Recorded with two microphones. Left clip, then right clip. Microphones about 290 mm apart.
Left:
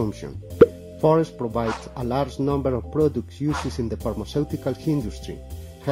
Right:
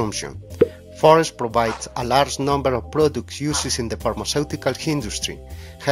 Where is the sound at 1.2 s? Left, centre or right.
Right.